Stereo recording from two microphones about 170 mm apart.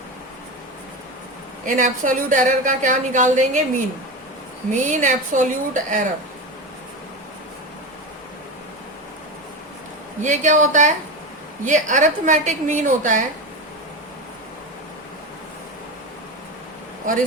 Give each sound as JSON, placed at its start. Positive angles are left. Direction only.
{"t": 1.6, "sound": "a woman's voice", "side_deg": -50}
{"t": 4.7, "sound": "a woman's voice", "side_deg": -45}
{"t": 10.2, "sound": "a woman's voice", "side_deg": -45}